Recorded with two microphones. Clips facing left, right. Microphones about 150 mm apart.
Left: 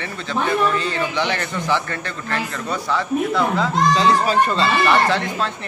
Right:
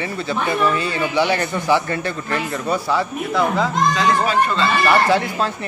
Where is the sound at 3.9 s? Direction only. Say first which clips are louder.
Left 2 dB; 35° left (ahead or behind).